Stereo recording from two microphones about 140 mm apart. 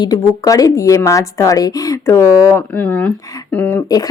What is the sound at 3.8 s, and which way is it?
Speech, 25° left (ahead or behind).